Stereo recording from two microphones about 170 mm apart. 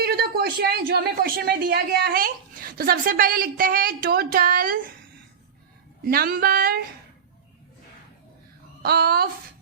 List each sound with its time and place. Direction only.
0.0 s a woman's voice: 70° right (ahead or behind)
6.1 s a woman's voice: 60° right (ahead or behind)
8.8 s a woman's voice: 65° right (ahead or behind)